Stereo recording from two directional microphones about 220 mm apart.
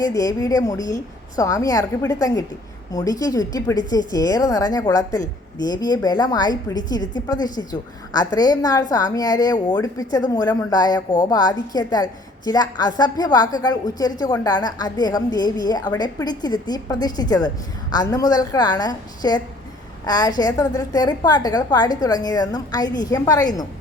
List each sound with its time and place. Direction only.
0.0 s speech: 15° left (ahead or behind)